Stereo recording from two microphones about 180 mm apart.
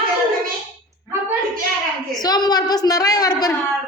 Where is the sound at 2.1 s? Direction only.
20° left (ahead or behind).